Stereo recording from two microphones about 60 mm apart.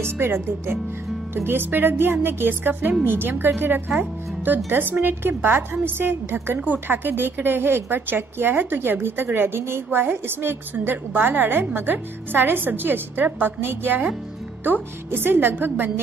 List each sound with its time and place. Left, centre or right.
0.0 s a woman's voice: right